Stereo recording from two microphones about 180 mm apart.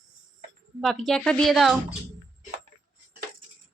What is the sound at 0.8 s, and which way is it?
Speech, centre (ahead or behind).